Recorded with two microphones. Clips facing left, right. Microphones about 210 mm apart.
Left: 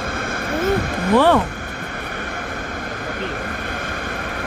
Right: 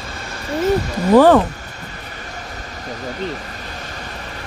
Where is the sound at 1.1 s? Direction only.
45° right (ahead or behind).